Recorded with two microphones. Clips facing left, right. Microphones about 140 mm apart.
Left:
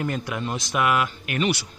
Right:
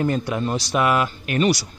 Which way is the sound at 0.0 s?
30° right (ahead or behind).